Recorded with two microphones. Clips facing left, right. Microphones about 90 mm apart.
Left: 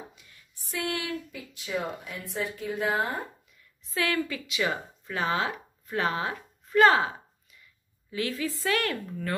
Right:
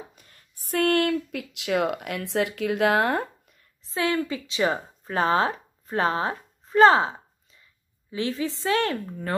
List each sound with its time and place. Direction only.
0.1 s a sound: 45° right (ahead or behind)
0.7 s speech: 60° right (ahead or behind); by 3.3 s 75° right (ahead or behind)
3.8 s a woman's voice: 25° right (ahead or behind)